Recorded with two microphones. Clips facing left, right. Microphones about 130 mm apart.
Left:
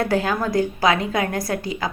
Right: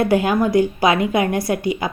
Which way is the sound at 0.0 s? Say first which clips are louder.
Right 5 dB; 15° right (ahead or behind).